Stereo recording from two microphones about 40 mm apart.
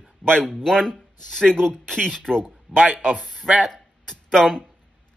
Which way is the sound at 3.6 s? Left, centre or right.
Centre.